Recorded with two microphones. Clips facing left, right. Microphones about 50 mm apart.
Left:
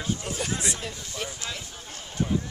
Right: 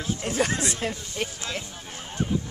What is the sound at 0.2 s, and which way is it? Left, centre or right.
Speech, right.